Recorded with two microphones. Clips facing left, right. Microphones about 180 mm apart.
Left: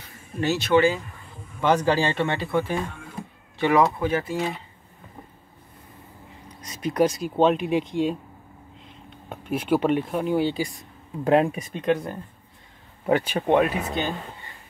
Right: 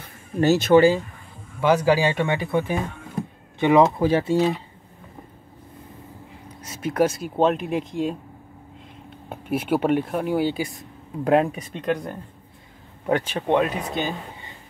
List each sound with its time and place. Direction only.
0.4 s speech: 45° right (ahead or behind)
1.6 s speech: 10° right (ahead or behind)
4.0 s speech: 30° right (ahead or behind)
6.6 s speech: 5° right (ahead or behind)
9.3 s speech: 5° right (ahead or behind)